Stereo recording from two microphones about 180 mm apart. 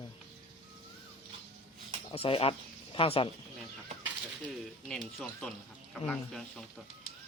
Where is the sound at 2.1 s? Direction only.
30° left (ahead or behind).